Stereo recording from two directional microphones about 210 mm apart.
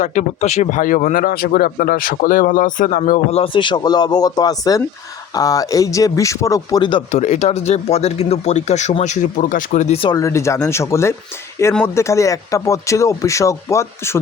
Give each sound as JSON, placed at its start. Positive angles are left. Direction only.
{"t": 0.0, "sound": "speech", "side_deg": 35}
{"t": 7.1, "sound": "speech", "side_deg": 35}